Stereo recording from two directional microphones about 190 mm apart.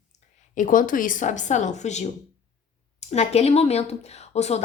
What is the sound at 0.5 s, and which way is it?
Speech, 45° left (ahead or behind).